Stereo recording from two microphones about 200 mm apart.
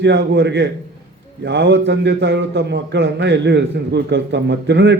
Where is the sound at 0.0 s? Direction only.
60° right (ahead or behind).